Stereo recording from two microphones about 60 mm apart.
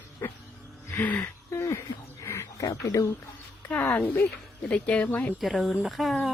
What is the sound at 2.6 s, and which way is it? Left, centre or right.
Speech, left.